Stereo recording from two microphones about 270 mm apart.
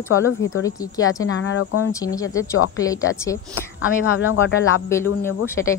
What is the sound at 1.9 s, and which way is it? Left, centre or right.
A woman's voice, centre.